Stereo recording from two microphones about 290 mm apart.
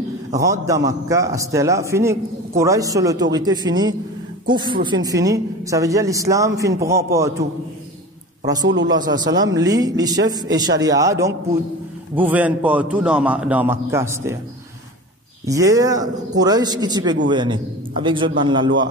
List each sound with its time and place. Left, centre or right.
0.3 s a man's voice: centre
8.6 s a man's voice: right
9.4 s a man's voice: centre
15.4 s a man's voice: centre